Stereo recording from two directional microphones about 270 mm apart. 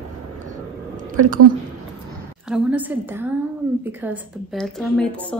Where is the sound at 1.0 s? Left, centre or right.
Right.